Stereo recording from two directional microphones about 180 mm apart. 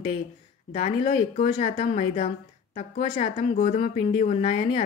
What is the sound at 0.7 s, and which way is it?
A woman's voice, 30° left (ahead or behind).